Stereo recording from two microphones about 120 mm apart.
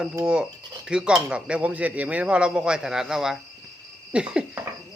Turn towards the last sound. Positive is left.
turn(degrees=-10)  # may be behind; listen again after turning